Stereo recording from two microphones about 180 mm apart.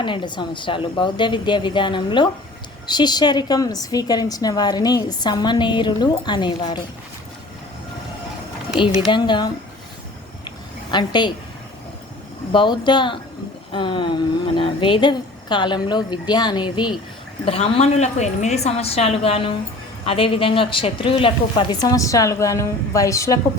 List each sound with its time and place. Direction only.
0.0 s a woman's voice: 25° left (ahead or behind)
8.8 s a woman's voice: 25° left (ahead or behind)
10.9 s a woman's voice: 25° left (ahead or behind)
12.5 s a woman's voice: 25° left (ahead or behind)